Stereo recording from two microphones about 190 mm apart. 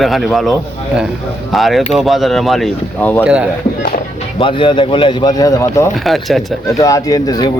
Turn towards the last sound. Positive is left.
turn(degrees=20)  # may be behind; listen again after turning